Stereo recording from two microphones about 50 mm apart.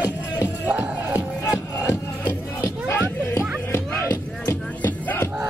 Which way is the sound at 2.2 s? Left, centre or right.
Left.